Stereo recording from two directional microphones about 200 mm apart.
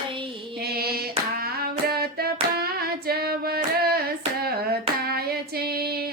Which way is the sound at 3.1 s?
50° right (ahead or behind).